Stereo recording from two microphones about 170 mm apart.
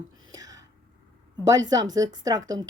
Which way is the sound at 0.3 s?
20° right (ahead or behind).